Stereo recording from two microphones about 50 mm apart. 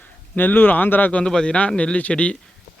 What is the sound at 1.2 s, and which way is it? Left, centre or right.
Speech, centre.